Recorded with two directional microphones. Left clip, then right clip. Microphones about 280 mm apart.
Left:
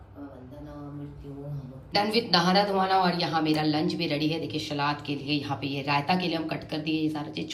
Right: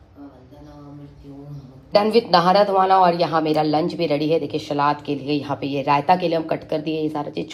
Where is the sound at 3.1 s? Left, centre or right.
Centre.